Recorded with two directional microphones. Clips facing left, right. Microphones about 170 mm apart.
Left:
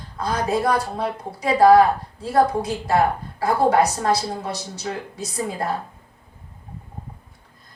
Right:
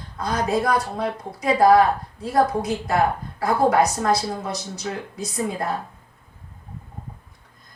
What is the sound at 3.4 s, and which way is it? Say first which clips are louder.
Speech: left 1 dB; 30° left (ahead or behind).